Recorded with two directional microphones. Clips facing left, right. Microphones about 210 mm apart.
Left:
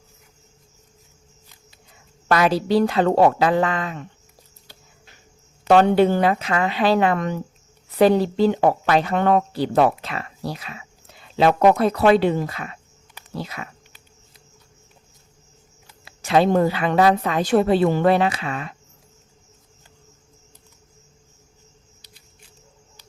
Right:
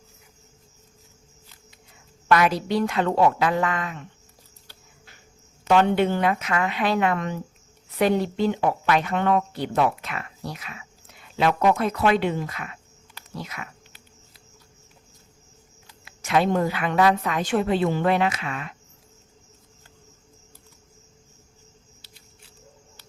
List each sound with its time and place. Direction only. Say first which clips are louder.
2.3 s a woman's voice: left 3 dB; 30° left (ahead or behind)
5.6 s a woman's voice: left 5 dB; 35° left (ahead or behind)
16.0 s a woman's voice: left 4 dB; 30° left (ahead or behind)
22.0 s camera: left 4 dB; 15° left (ahead or behind)